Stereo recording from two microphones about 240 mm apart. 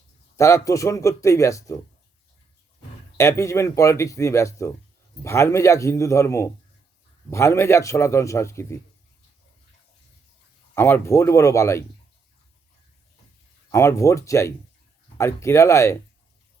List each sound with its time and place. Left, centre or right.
0.3 s a man's voice: centre
3.2 s a man's voice: centre
10.8 s a man's voice: centre
13.7 s a man's voice: centre